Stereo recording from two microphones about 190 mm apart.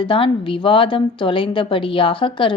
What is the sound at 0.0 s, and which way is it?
A woman's voice, 25° left (ahead or behind).